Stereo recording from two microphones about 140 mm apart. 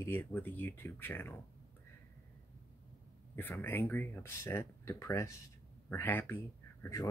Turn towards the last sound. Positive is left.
turn(degrees=15)  # may be behind; listen again after turning